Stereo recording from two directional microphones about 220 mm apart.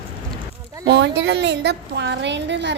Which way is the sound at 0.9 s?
50° right (ahead or behind).